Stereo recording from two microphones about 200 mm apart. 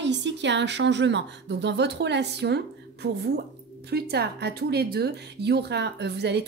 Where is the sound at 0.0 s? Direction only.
60° right (ahead or behind).